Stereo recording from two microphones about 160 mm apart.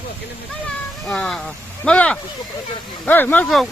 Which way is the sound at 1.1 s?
5° left (ahead or behind).